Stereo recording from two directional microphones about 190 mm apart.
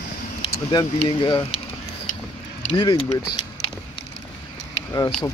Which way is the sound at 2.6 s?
30° left (ahead or behind).